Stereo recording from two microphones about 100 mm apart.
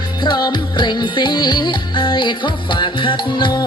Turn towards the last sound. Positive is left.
turn(degrees=55)  # may be behind; listen again after turning